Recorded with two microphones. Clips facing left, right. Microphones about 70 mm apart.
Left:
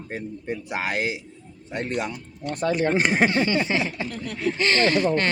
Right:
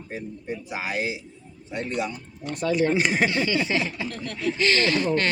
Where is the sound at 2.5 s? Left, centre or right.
Left.